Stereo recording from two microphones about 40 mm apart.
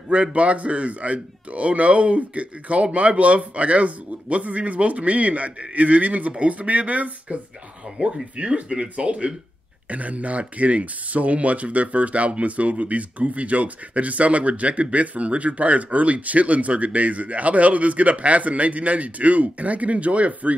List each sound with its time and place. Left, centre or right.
0.1 s speech: right